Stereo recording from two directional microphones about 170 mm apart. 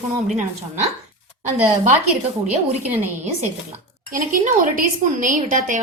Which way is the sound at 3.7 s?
55° right (ahead or behind).